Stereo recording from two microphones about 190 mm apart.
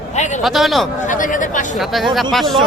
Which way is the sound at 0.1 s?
40° left (ahead or behind).